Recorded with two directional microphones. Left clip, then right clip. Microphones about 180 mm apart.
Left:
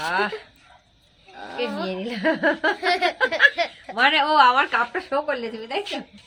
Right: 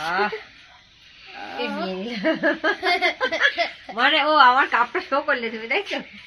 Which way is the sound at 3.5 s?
15° left (ahead or behind).